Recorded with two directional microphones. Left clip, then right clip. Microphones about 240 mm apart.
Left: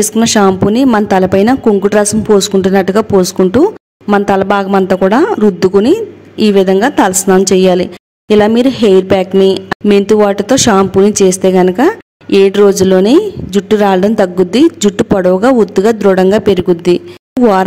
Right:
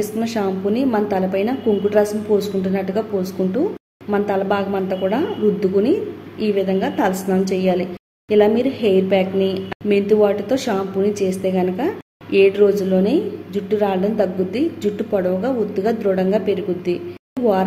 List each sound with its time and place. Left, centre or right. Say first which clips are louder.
0.0 s a woman's voice: left 12 dB; left
17.4 s speech: left 9 dB; centre